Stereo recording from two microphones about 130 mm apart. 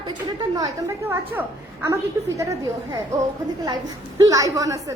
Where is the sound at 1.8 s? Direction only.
25° right (ahead or behind).